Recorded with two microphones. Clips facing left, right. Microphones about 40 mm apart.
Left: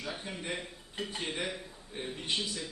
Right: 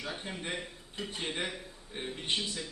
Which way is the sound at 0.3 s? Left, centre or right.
Right.